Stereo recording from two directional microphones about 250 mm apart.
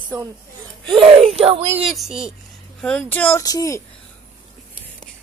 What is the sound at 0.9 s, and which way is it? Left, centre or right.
Speech, right.